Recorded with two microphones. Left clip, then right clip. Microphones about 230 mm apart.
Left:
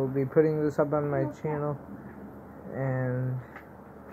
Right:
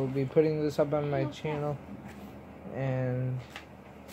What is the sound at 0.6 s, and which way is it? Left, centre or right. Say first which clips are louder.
Speech: left 2 dB; centre.